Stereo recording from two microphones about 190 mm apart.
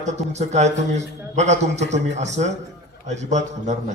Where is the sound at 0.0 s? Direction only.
35° right (ahead or behind).